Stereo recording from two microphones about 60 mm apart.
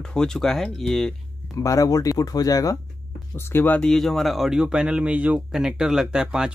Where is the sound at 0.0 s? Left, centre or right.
Centre.